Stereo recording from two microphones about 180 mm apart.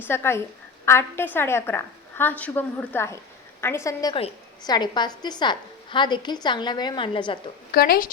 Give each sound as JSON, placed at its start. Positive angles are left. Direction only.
{"t": 0.0, "sound": "a woman's voice", "side_deg": 15}
{"t": 7.7, "sound": "speech", "side_deg": 55}